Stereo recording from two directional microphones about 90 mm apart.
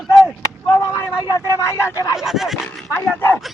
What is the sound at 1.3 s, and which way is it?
Speech, 30° left (ahead or behind).